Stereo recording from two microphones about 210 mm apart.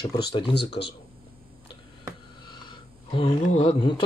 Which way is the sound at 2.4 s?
25° left (ahead or behind).